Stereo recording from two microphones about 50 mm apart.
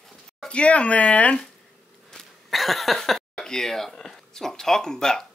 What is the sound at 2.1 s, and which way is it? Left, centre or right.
Speech, centre.